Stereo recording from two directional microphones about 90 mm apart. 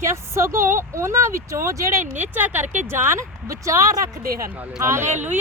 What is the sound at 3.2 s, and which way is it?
Speech, 35° right (ahead or behind).